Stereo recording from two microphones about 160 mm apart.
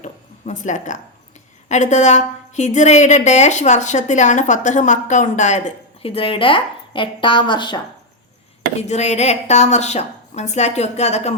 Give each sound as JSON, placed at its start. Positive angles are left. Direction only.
{"t": 0.0, "sound": "a sound", "side_deg": 50}
{"t": 1.6, "sound": "a woman's voice", "side_deg": 45}
{"t": 8.9, "sound": "a woman's voice", "side_deg": 45}